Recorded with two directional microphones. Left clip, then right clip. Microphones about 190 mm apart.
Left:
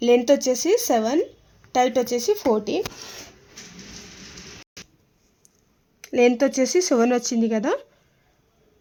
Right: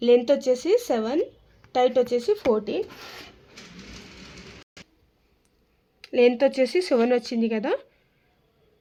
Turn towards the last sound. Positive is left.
turn(degrees=50)  # may be behind; listen again after turning